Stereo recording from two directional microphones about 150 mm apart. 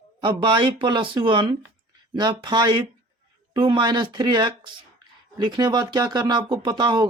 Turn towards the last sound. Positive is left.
turn(degrees=-30)  # may be behind; listen again after turning